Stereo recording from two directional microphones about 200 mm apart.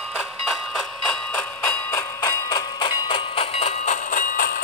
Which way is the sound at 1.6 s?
15° left (ahead or behind).